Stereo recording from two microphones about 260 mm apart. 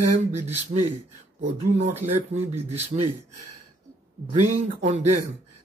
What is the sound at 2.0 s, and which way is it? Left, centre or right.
Speech, right.